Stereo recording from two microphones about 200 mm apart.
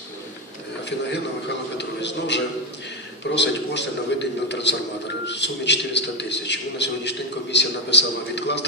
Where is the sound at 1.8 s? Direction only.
60° left (ahead or behind).